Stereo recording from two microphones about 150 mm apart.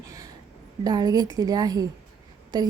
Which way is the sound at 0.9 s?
25° right (ahead or behind).